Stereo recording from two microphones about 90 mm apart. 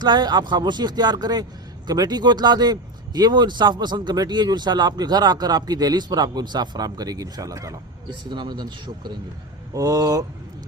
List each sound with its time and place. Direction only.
0.0 s speech: 55° right (ahead or behind)
8.3 s a man's voice: 55° right (ahead or behind)
9.7 s speech: 40° right (ahead or behind)